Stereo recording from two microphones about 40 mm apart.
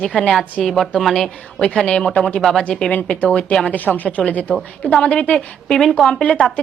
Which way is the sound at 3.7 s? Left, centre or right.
Left.